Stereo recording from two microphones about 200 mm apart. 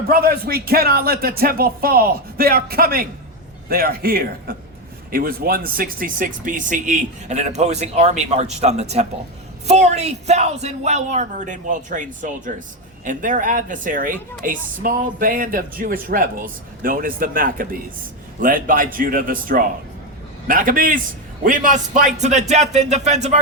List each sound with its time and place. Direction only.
0.1 s speech: 50° right (ahead or behind)